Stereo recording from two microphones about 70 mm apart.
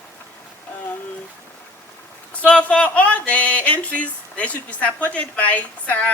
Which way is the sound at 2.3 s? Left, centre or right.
Centre.